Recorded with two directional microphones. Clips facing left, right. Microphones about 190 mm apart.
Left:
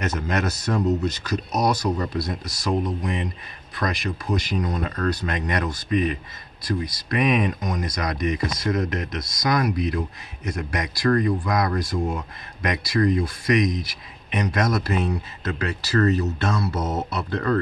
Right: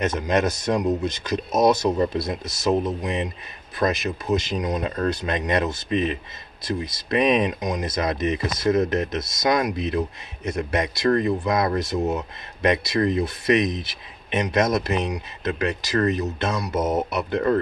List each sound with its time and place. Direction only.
0.0 s speech: 20° right (ahead or behind)